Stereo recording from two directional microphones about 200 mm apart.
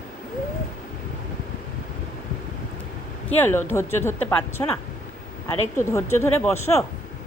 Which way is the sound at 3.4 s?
10° left (ahead or behind).